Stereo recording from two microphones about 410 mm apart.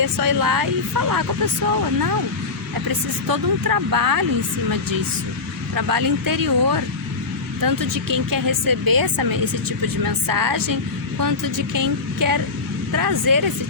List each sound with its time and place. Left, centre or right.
0.0 s speech: right
3.2 s speech: right
5.7 s speech: right